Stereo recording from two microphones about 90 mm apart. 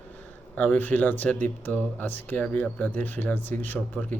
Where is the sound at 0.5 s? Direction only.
15° left (ahead or behind).